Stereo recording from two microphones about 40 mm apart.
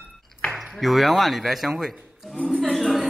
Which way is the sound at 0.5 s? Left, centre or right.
Centre.